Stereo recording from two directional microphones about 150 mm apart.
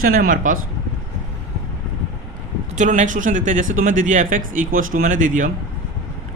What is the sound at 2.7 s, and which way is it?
A man's voice, 55° right (ahead or behind).